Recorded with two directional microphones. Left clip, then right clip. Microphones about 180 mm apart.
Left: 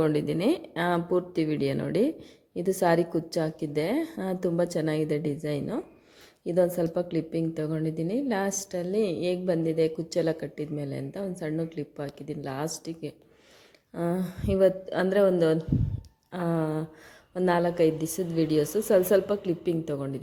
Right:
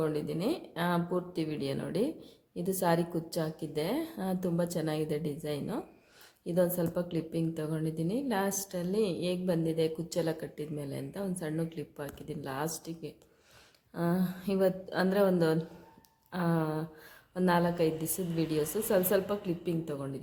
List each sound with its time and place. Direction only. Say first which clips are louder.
0.0 s a woman's voice: left 7 dB; 45° left (ahead or behind)